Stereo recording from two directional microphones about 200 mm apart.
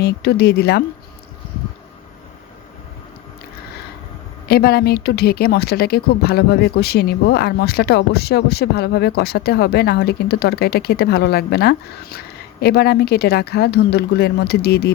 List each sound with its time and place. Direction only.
0.0 s speech: 55° left (ahead or behind)
4.4 s speech: 50° left (ahead or behind)